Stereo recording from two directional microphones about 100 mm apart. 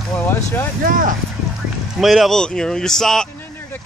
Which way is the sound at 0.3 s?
20° left (ahead or behind).